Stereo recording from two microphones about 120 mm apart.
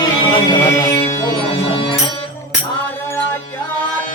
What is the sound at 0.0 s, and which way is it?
Music, 35° left (ahead or behind).